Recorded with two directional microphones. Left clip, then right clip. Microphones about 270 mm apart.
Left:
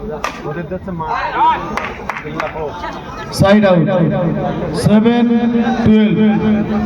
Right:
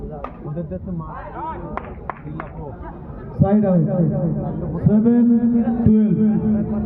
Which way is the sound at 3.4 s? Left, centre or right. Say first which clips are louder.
Left 9 dB; left.